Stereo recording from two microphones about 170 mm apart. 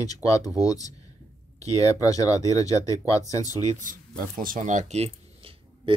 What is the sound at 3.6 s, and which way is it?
Speech, 50° right (ahead or behind).